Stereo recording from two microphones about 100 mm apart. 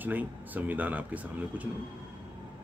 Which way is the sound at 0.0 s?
15° right (ahead or behind).